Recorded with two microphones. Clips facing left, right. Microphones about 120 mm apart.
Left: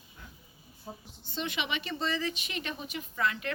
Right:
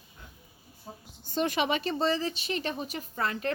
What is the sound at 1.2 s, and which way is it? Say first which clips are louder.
Speech: right 8 dB; 45° right (ahead or behind).